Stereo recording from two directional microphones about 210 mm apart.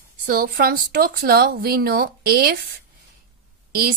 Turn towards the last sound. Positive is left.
turn(degrees=-45)  # may be behind; listen again after turning